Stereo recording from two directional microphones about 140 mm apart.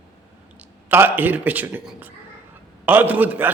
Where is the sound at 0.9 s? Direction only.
15° right (ahead or behind).